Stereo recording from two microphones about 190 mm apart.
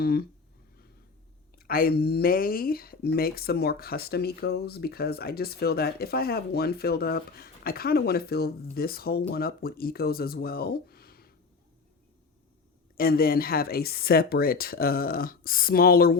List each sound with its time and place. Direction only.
0.0 s speech: 55° left (ahead or behind)
1.5 s speech: 50° left (ahead or behind)
13.0 s speech: 50° left (ahead or behind)